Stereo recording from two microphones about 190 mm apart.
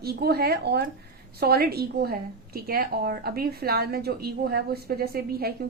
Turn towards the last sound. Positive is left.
turn(degrees=-55)  # may be behind; listen again after turning